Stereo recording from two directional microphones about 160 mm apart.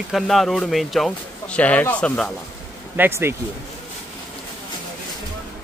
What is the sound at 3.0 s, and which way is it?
Speech, 15° right (ahead or behind).